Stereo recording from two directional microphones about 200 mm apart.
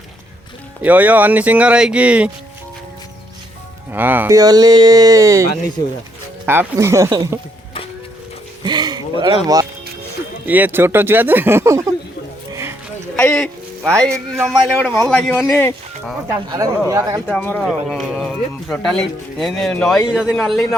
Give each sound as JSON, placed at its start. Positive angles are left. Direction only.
{"t": 0.8, "sound": "speech", "side_deg": -10}
{"t": 3.9, "sound": "speech", "side_deg": -10}
{"t": 8.6, "sound": "a sound", "side_deg": -20}
{"t": 10.4, "sound": "speech", "side_deg": -10}
{"t": 12.5, "sound": "a sound", "side_deg": -15}
{"t": 13.1, "sound": "music", "side_deg": 5}
{"t": 14.3, "sound": "speech", "side_deg": -10}
{"t": 14.8, "sound": "speech", "side_deg": 5}
{"t": 16.9, "sound": "speech", "side_deg": -15}
{"t": 17.2, "sound": "speech", "side_deg": 5}